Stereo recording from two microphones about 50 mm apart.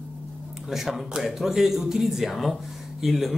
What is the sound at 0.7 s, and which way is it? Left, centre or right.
Speech, centre.